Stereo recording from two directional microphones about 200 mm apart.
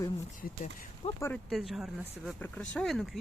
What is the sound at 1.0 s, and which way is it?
Speech, 30° left (ahead or behind).